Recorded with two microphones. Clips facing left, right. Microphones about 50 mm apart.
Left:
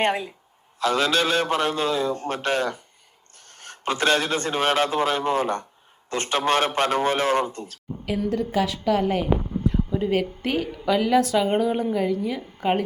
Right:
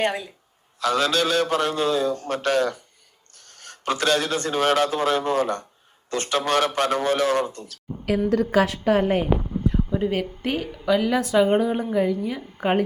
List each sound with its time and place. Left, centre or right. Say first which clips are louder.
0.0 s a man's voice: left 1 dB; left
8.3 s a woman's voice: right 4 dB; right
8.6 s a woman's voice: right 2 dB; right
9.9 s speech: left 1 dB; centre
10.8 s speech: left 1 dB; centre
12.6 s a woman's voice: even; right